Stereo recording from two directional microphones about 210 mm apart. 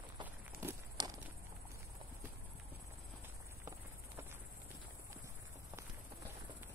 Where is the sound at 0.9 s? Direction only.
15° right (ahead or behind).